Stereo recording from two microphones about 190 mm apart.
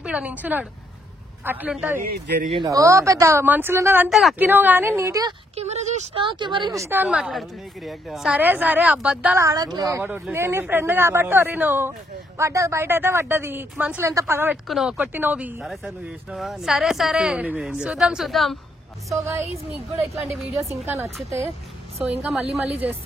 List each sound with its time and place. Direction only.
0.0 s a woman's voice: 5° right (ahead or behind)
2.0 s speech: 55° right (ahead or behind)
2.5 s a woman's voice: 20° right (ahead or behind)
5.6 s a woman's voice: 35° right (ahead or behind); by 9.5 s 5° right (ahead or behind)
9.5 s a woman's voice: 20° right (ahead or behind); by 18.6 s centre (ahead or behind)
19.0 s a woman's voice: 15° right (ahead or behind)
22.0 s a woman's voice: 10° right (ahead or behind)
22.5 s a woman's voice: 30° right (ahead or behind)